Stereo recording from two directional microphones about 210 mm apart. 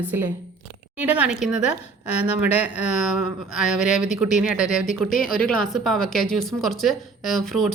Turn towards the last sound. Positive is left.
turn(degrees=0)  # may be behind; listen again after turning